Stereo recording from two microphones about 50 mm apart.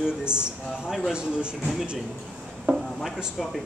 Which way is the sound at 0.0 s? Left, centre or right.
Centre.